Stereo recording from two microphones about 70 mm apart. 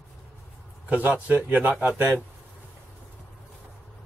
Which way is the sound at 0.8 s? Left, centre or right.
Right.